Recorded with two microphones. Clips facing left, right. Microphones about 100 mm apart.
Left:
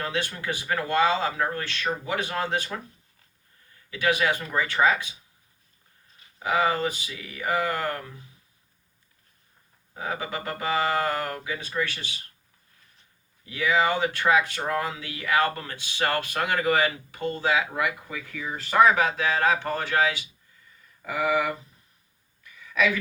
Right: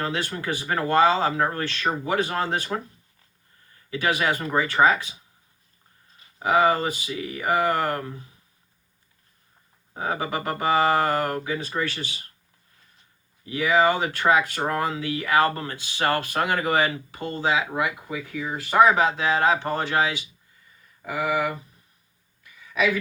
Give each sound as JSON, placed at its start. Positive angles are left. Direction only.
{"t": 0.0, "sound": "speech", "side_deg": -35}
{"t": 3.8, "sound": "speech", "side_deg": -35}
{"t": 6.4, "sound": "speech", "side_deg": -35}
{"t": 9.9, "sound": "speech", "side_deg": -35}
{"t": 13.4, "sound": "speech", "side_deg": -30}
{"t": 21.0, "sound": "speech", "side_deg": -5}
{"t": 22.6, "sound": "a sound", "side_deg": -15}